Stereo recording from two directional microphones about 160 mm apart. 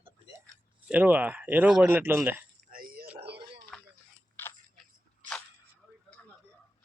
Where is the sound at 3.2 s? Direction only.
90° right.